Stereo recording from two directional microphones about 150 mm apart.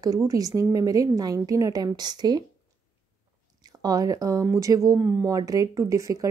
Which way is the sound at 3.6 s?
25° right (ahead or behind).